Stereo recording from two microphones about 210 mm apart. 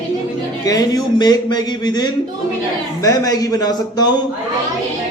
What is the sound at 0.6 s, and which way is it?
A man's voice, 15° left (ahead or behind).